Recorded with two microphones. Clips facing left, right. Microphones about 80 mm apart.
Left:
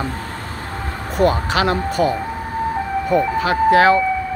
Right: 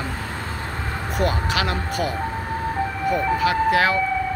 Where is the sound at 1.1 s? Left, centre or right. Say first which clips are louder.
Left 6 dB; left.